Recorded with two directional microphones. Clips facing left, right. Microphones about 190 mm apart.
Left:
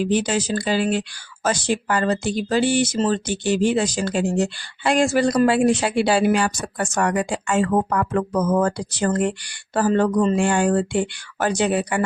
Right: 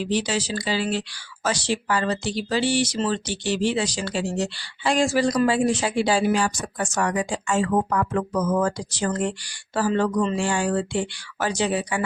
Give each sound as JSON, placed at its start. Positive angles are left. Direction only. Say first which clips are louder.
{"t": 0.0, "sound": "speech", "louder": "left 4 dB", "side_deg": 50}